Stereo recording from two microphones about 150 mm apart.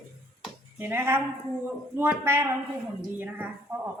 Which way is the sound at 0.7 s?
15° right (ahead or behind).